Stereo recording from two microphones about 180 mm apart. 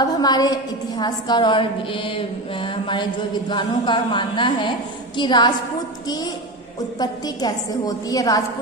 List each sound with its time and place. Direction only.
0.0 s a woman's voice: 20° left (ahead or behind)